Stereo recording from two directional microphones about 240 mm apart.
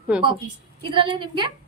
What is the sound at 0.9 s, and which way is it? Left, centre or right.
Speech, centre.